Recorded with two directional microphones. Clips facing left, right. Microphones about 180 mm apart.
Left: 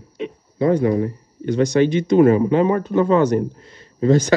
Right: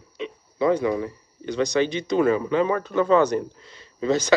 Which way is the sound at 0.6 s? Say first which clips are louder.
Left 4 dB; 50° left (ahead or behind).